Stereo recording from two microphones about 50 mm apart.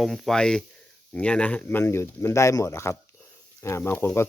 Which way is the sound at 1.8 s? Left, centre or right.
Left.